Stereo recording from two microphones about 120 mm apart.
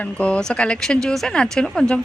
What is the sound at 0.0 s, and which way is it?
Speech, 10° left (ahead or behind).